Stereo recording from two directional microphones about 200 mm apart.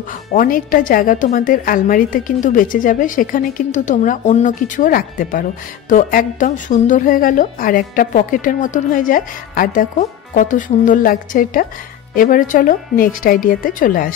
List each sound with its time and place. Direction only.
0.3 s a woman's voice: 45° left (ahead or behind)